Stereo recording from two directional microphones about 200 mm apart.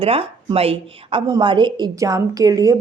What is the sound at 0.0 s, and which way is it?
A woman's voice, 30° right (ahead or behind).